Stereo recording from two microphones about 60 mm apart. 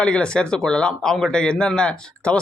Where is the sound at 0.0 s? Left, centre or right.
Centre.